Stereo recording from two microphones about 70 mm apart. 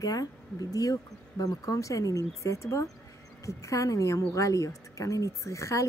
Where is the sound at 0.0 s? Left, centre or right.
Left.